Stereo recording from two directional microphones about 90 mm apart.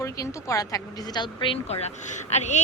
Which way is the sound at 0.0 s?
35° left (ahead or behind).